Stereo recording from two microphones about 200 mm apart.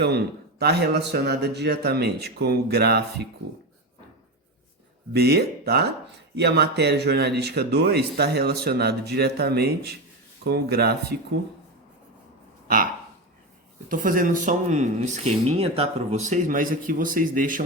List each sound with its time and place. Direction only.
0.6 s speech: 55° right (ahead or behind)
5.1 s speech: 50° right (ahead or behind)
12.6 s a sound: 45° right (ahead or behind)
13.8 s speech: 45° right (ahead or behind)